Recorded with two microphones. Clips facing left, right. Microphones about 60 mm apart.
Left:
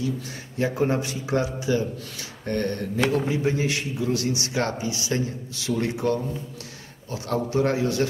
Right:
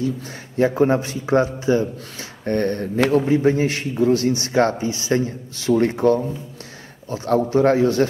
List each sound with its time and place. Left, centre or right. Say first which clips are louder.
0.6 s a man's voice: right 7 dB; right